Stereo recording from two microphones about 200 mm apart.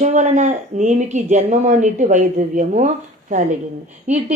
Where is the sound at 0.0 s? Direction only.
35° right (ahead or behind).